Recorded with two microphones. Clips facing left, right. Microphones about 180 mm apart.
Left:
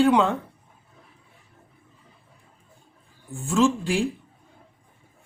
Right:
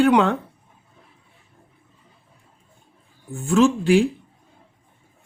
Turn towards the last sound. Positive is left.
turn(degrees=-65)  # may be behind; listen again after turning